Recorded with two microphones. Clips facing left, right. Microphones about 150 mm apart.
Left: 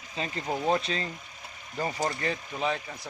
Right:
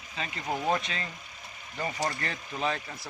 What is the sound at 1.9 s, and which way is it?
Speech, 15° left (ahead or behind).